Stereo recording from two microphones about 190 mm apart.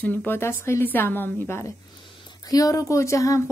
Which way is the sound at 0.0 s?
10° left (ahead or behind).